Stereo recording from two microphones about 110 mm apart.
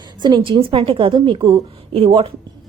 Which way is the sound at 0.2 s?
40° right (ahead or behind).